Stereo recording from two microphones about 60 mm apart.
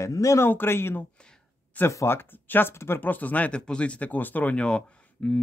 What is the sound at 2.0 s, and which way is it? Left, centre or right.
Speech, left.